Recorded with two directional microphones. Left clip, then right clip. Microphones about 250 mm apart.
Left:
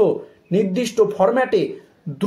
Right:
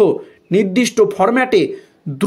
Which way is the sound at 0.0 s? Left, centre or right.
Right.